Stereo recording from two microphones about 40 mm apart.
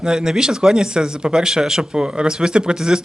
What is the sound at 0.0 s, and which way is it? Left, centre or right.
Speech, centre.